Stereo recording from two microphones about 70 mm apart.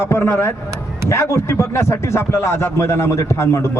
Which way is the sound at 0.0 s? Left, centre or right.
Left.